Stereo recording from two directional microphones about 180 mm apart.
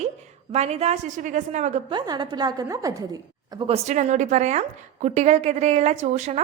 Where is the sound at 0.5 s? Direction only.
35° right (ahead or behind).